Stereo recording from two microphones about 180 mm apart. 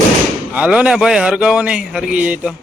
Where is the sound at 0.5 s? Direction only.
5° right (ahead or behind).